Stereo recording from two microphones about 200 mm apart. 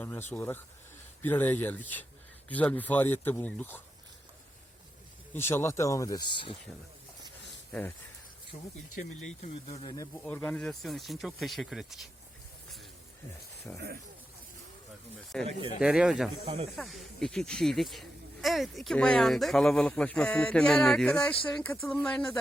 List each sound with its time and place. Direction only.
0.0 s speech: 10° left (ahead or behind)
5.3 s speech: 10° left (ahead or behind)
7.7 s speech: 10° left (ahead or behind)
8.5 s speech: 30° left (ahead or behind)
10.2 s speech: 10° left (ahead or behind)
13.7 s speech: 15° left (ahead or behind)
15.3 s speech: 5° left (ahead or behind)